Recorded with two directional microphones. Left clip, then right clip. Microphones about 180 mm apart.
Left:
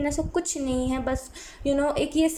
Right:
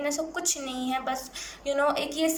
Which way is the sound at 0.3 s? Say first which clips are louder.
Left 4 dB; 40° left (ahead or behind).